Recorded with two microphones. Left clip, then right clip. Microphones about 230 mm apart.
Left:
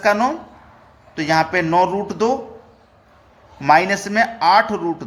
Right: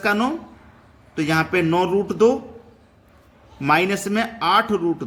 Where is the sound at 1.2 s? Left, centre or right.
Centre.